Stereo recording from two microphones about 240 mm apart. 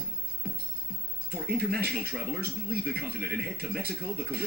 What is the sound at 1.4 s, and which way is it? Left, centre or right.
Speech, right.